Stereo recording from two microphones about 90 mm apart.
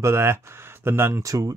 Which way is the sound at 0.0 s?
30° right (ahead or behind).